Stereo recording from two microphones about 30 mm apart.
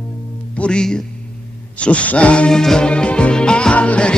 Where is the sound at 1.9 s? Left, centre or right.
Left.